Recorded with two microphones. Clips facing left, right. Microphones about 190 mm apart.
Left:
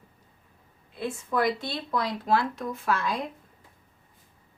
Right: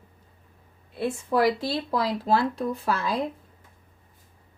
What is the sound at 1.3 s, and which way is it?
Speech, 30° right (ahead or behind).